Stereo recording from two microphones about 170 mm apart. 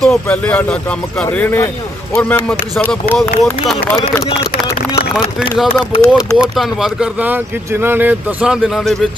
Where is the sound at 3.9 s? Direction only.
15° left (ahead or behind).